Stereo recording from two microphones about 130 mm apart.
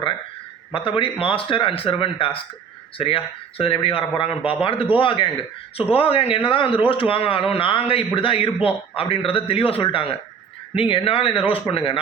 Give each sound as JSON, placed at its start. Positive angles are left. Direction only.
{"t": 0.7, "sound": "speech", "side_deg": 45}